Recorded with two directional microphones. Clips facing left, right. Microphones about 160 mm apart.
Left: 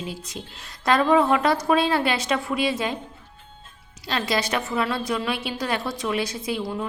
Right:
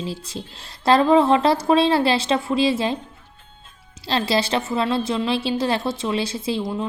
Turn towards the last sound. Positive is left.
turn(degrees=-20)  # may be behind; listen again after turning